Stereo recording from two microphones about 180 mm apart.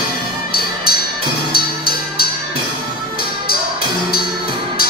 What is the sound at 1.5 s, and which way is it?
Music, 55° left (ahead or behind).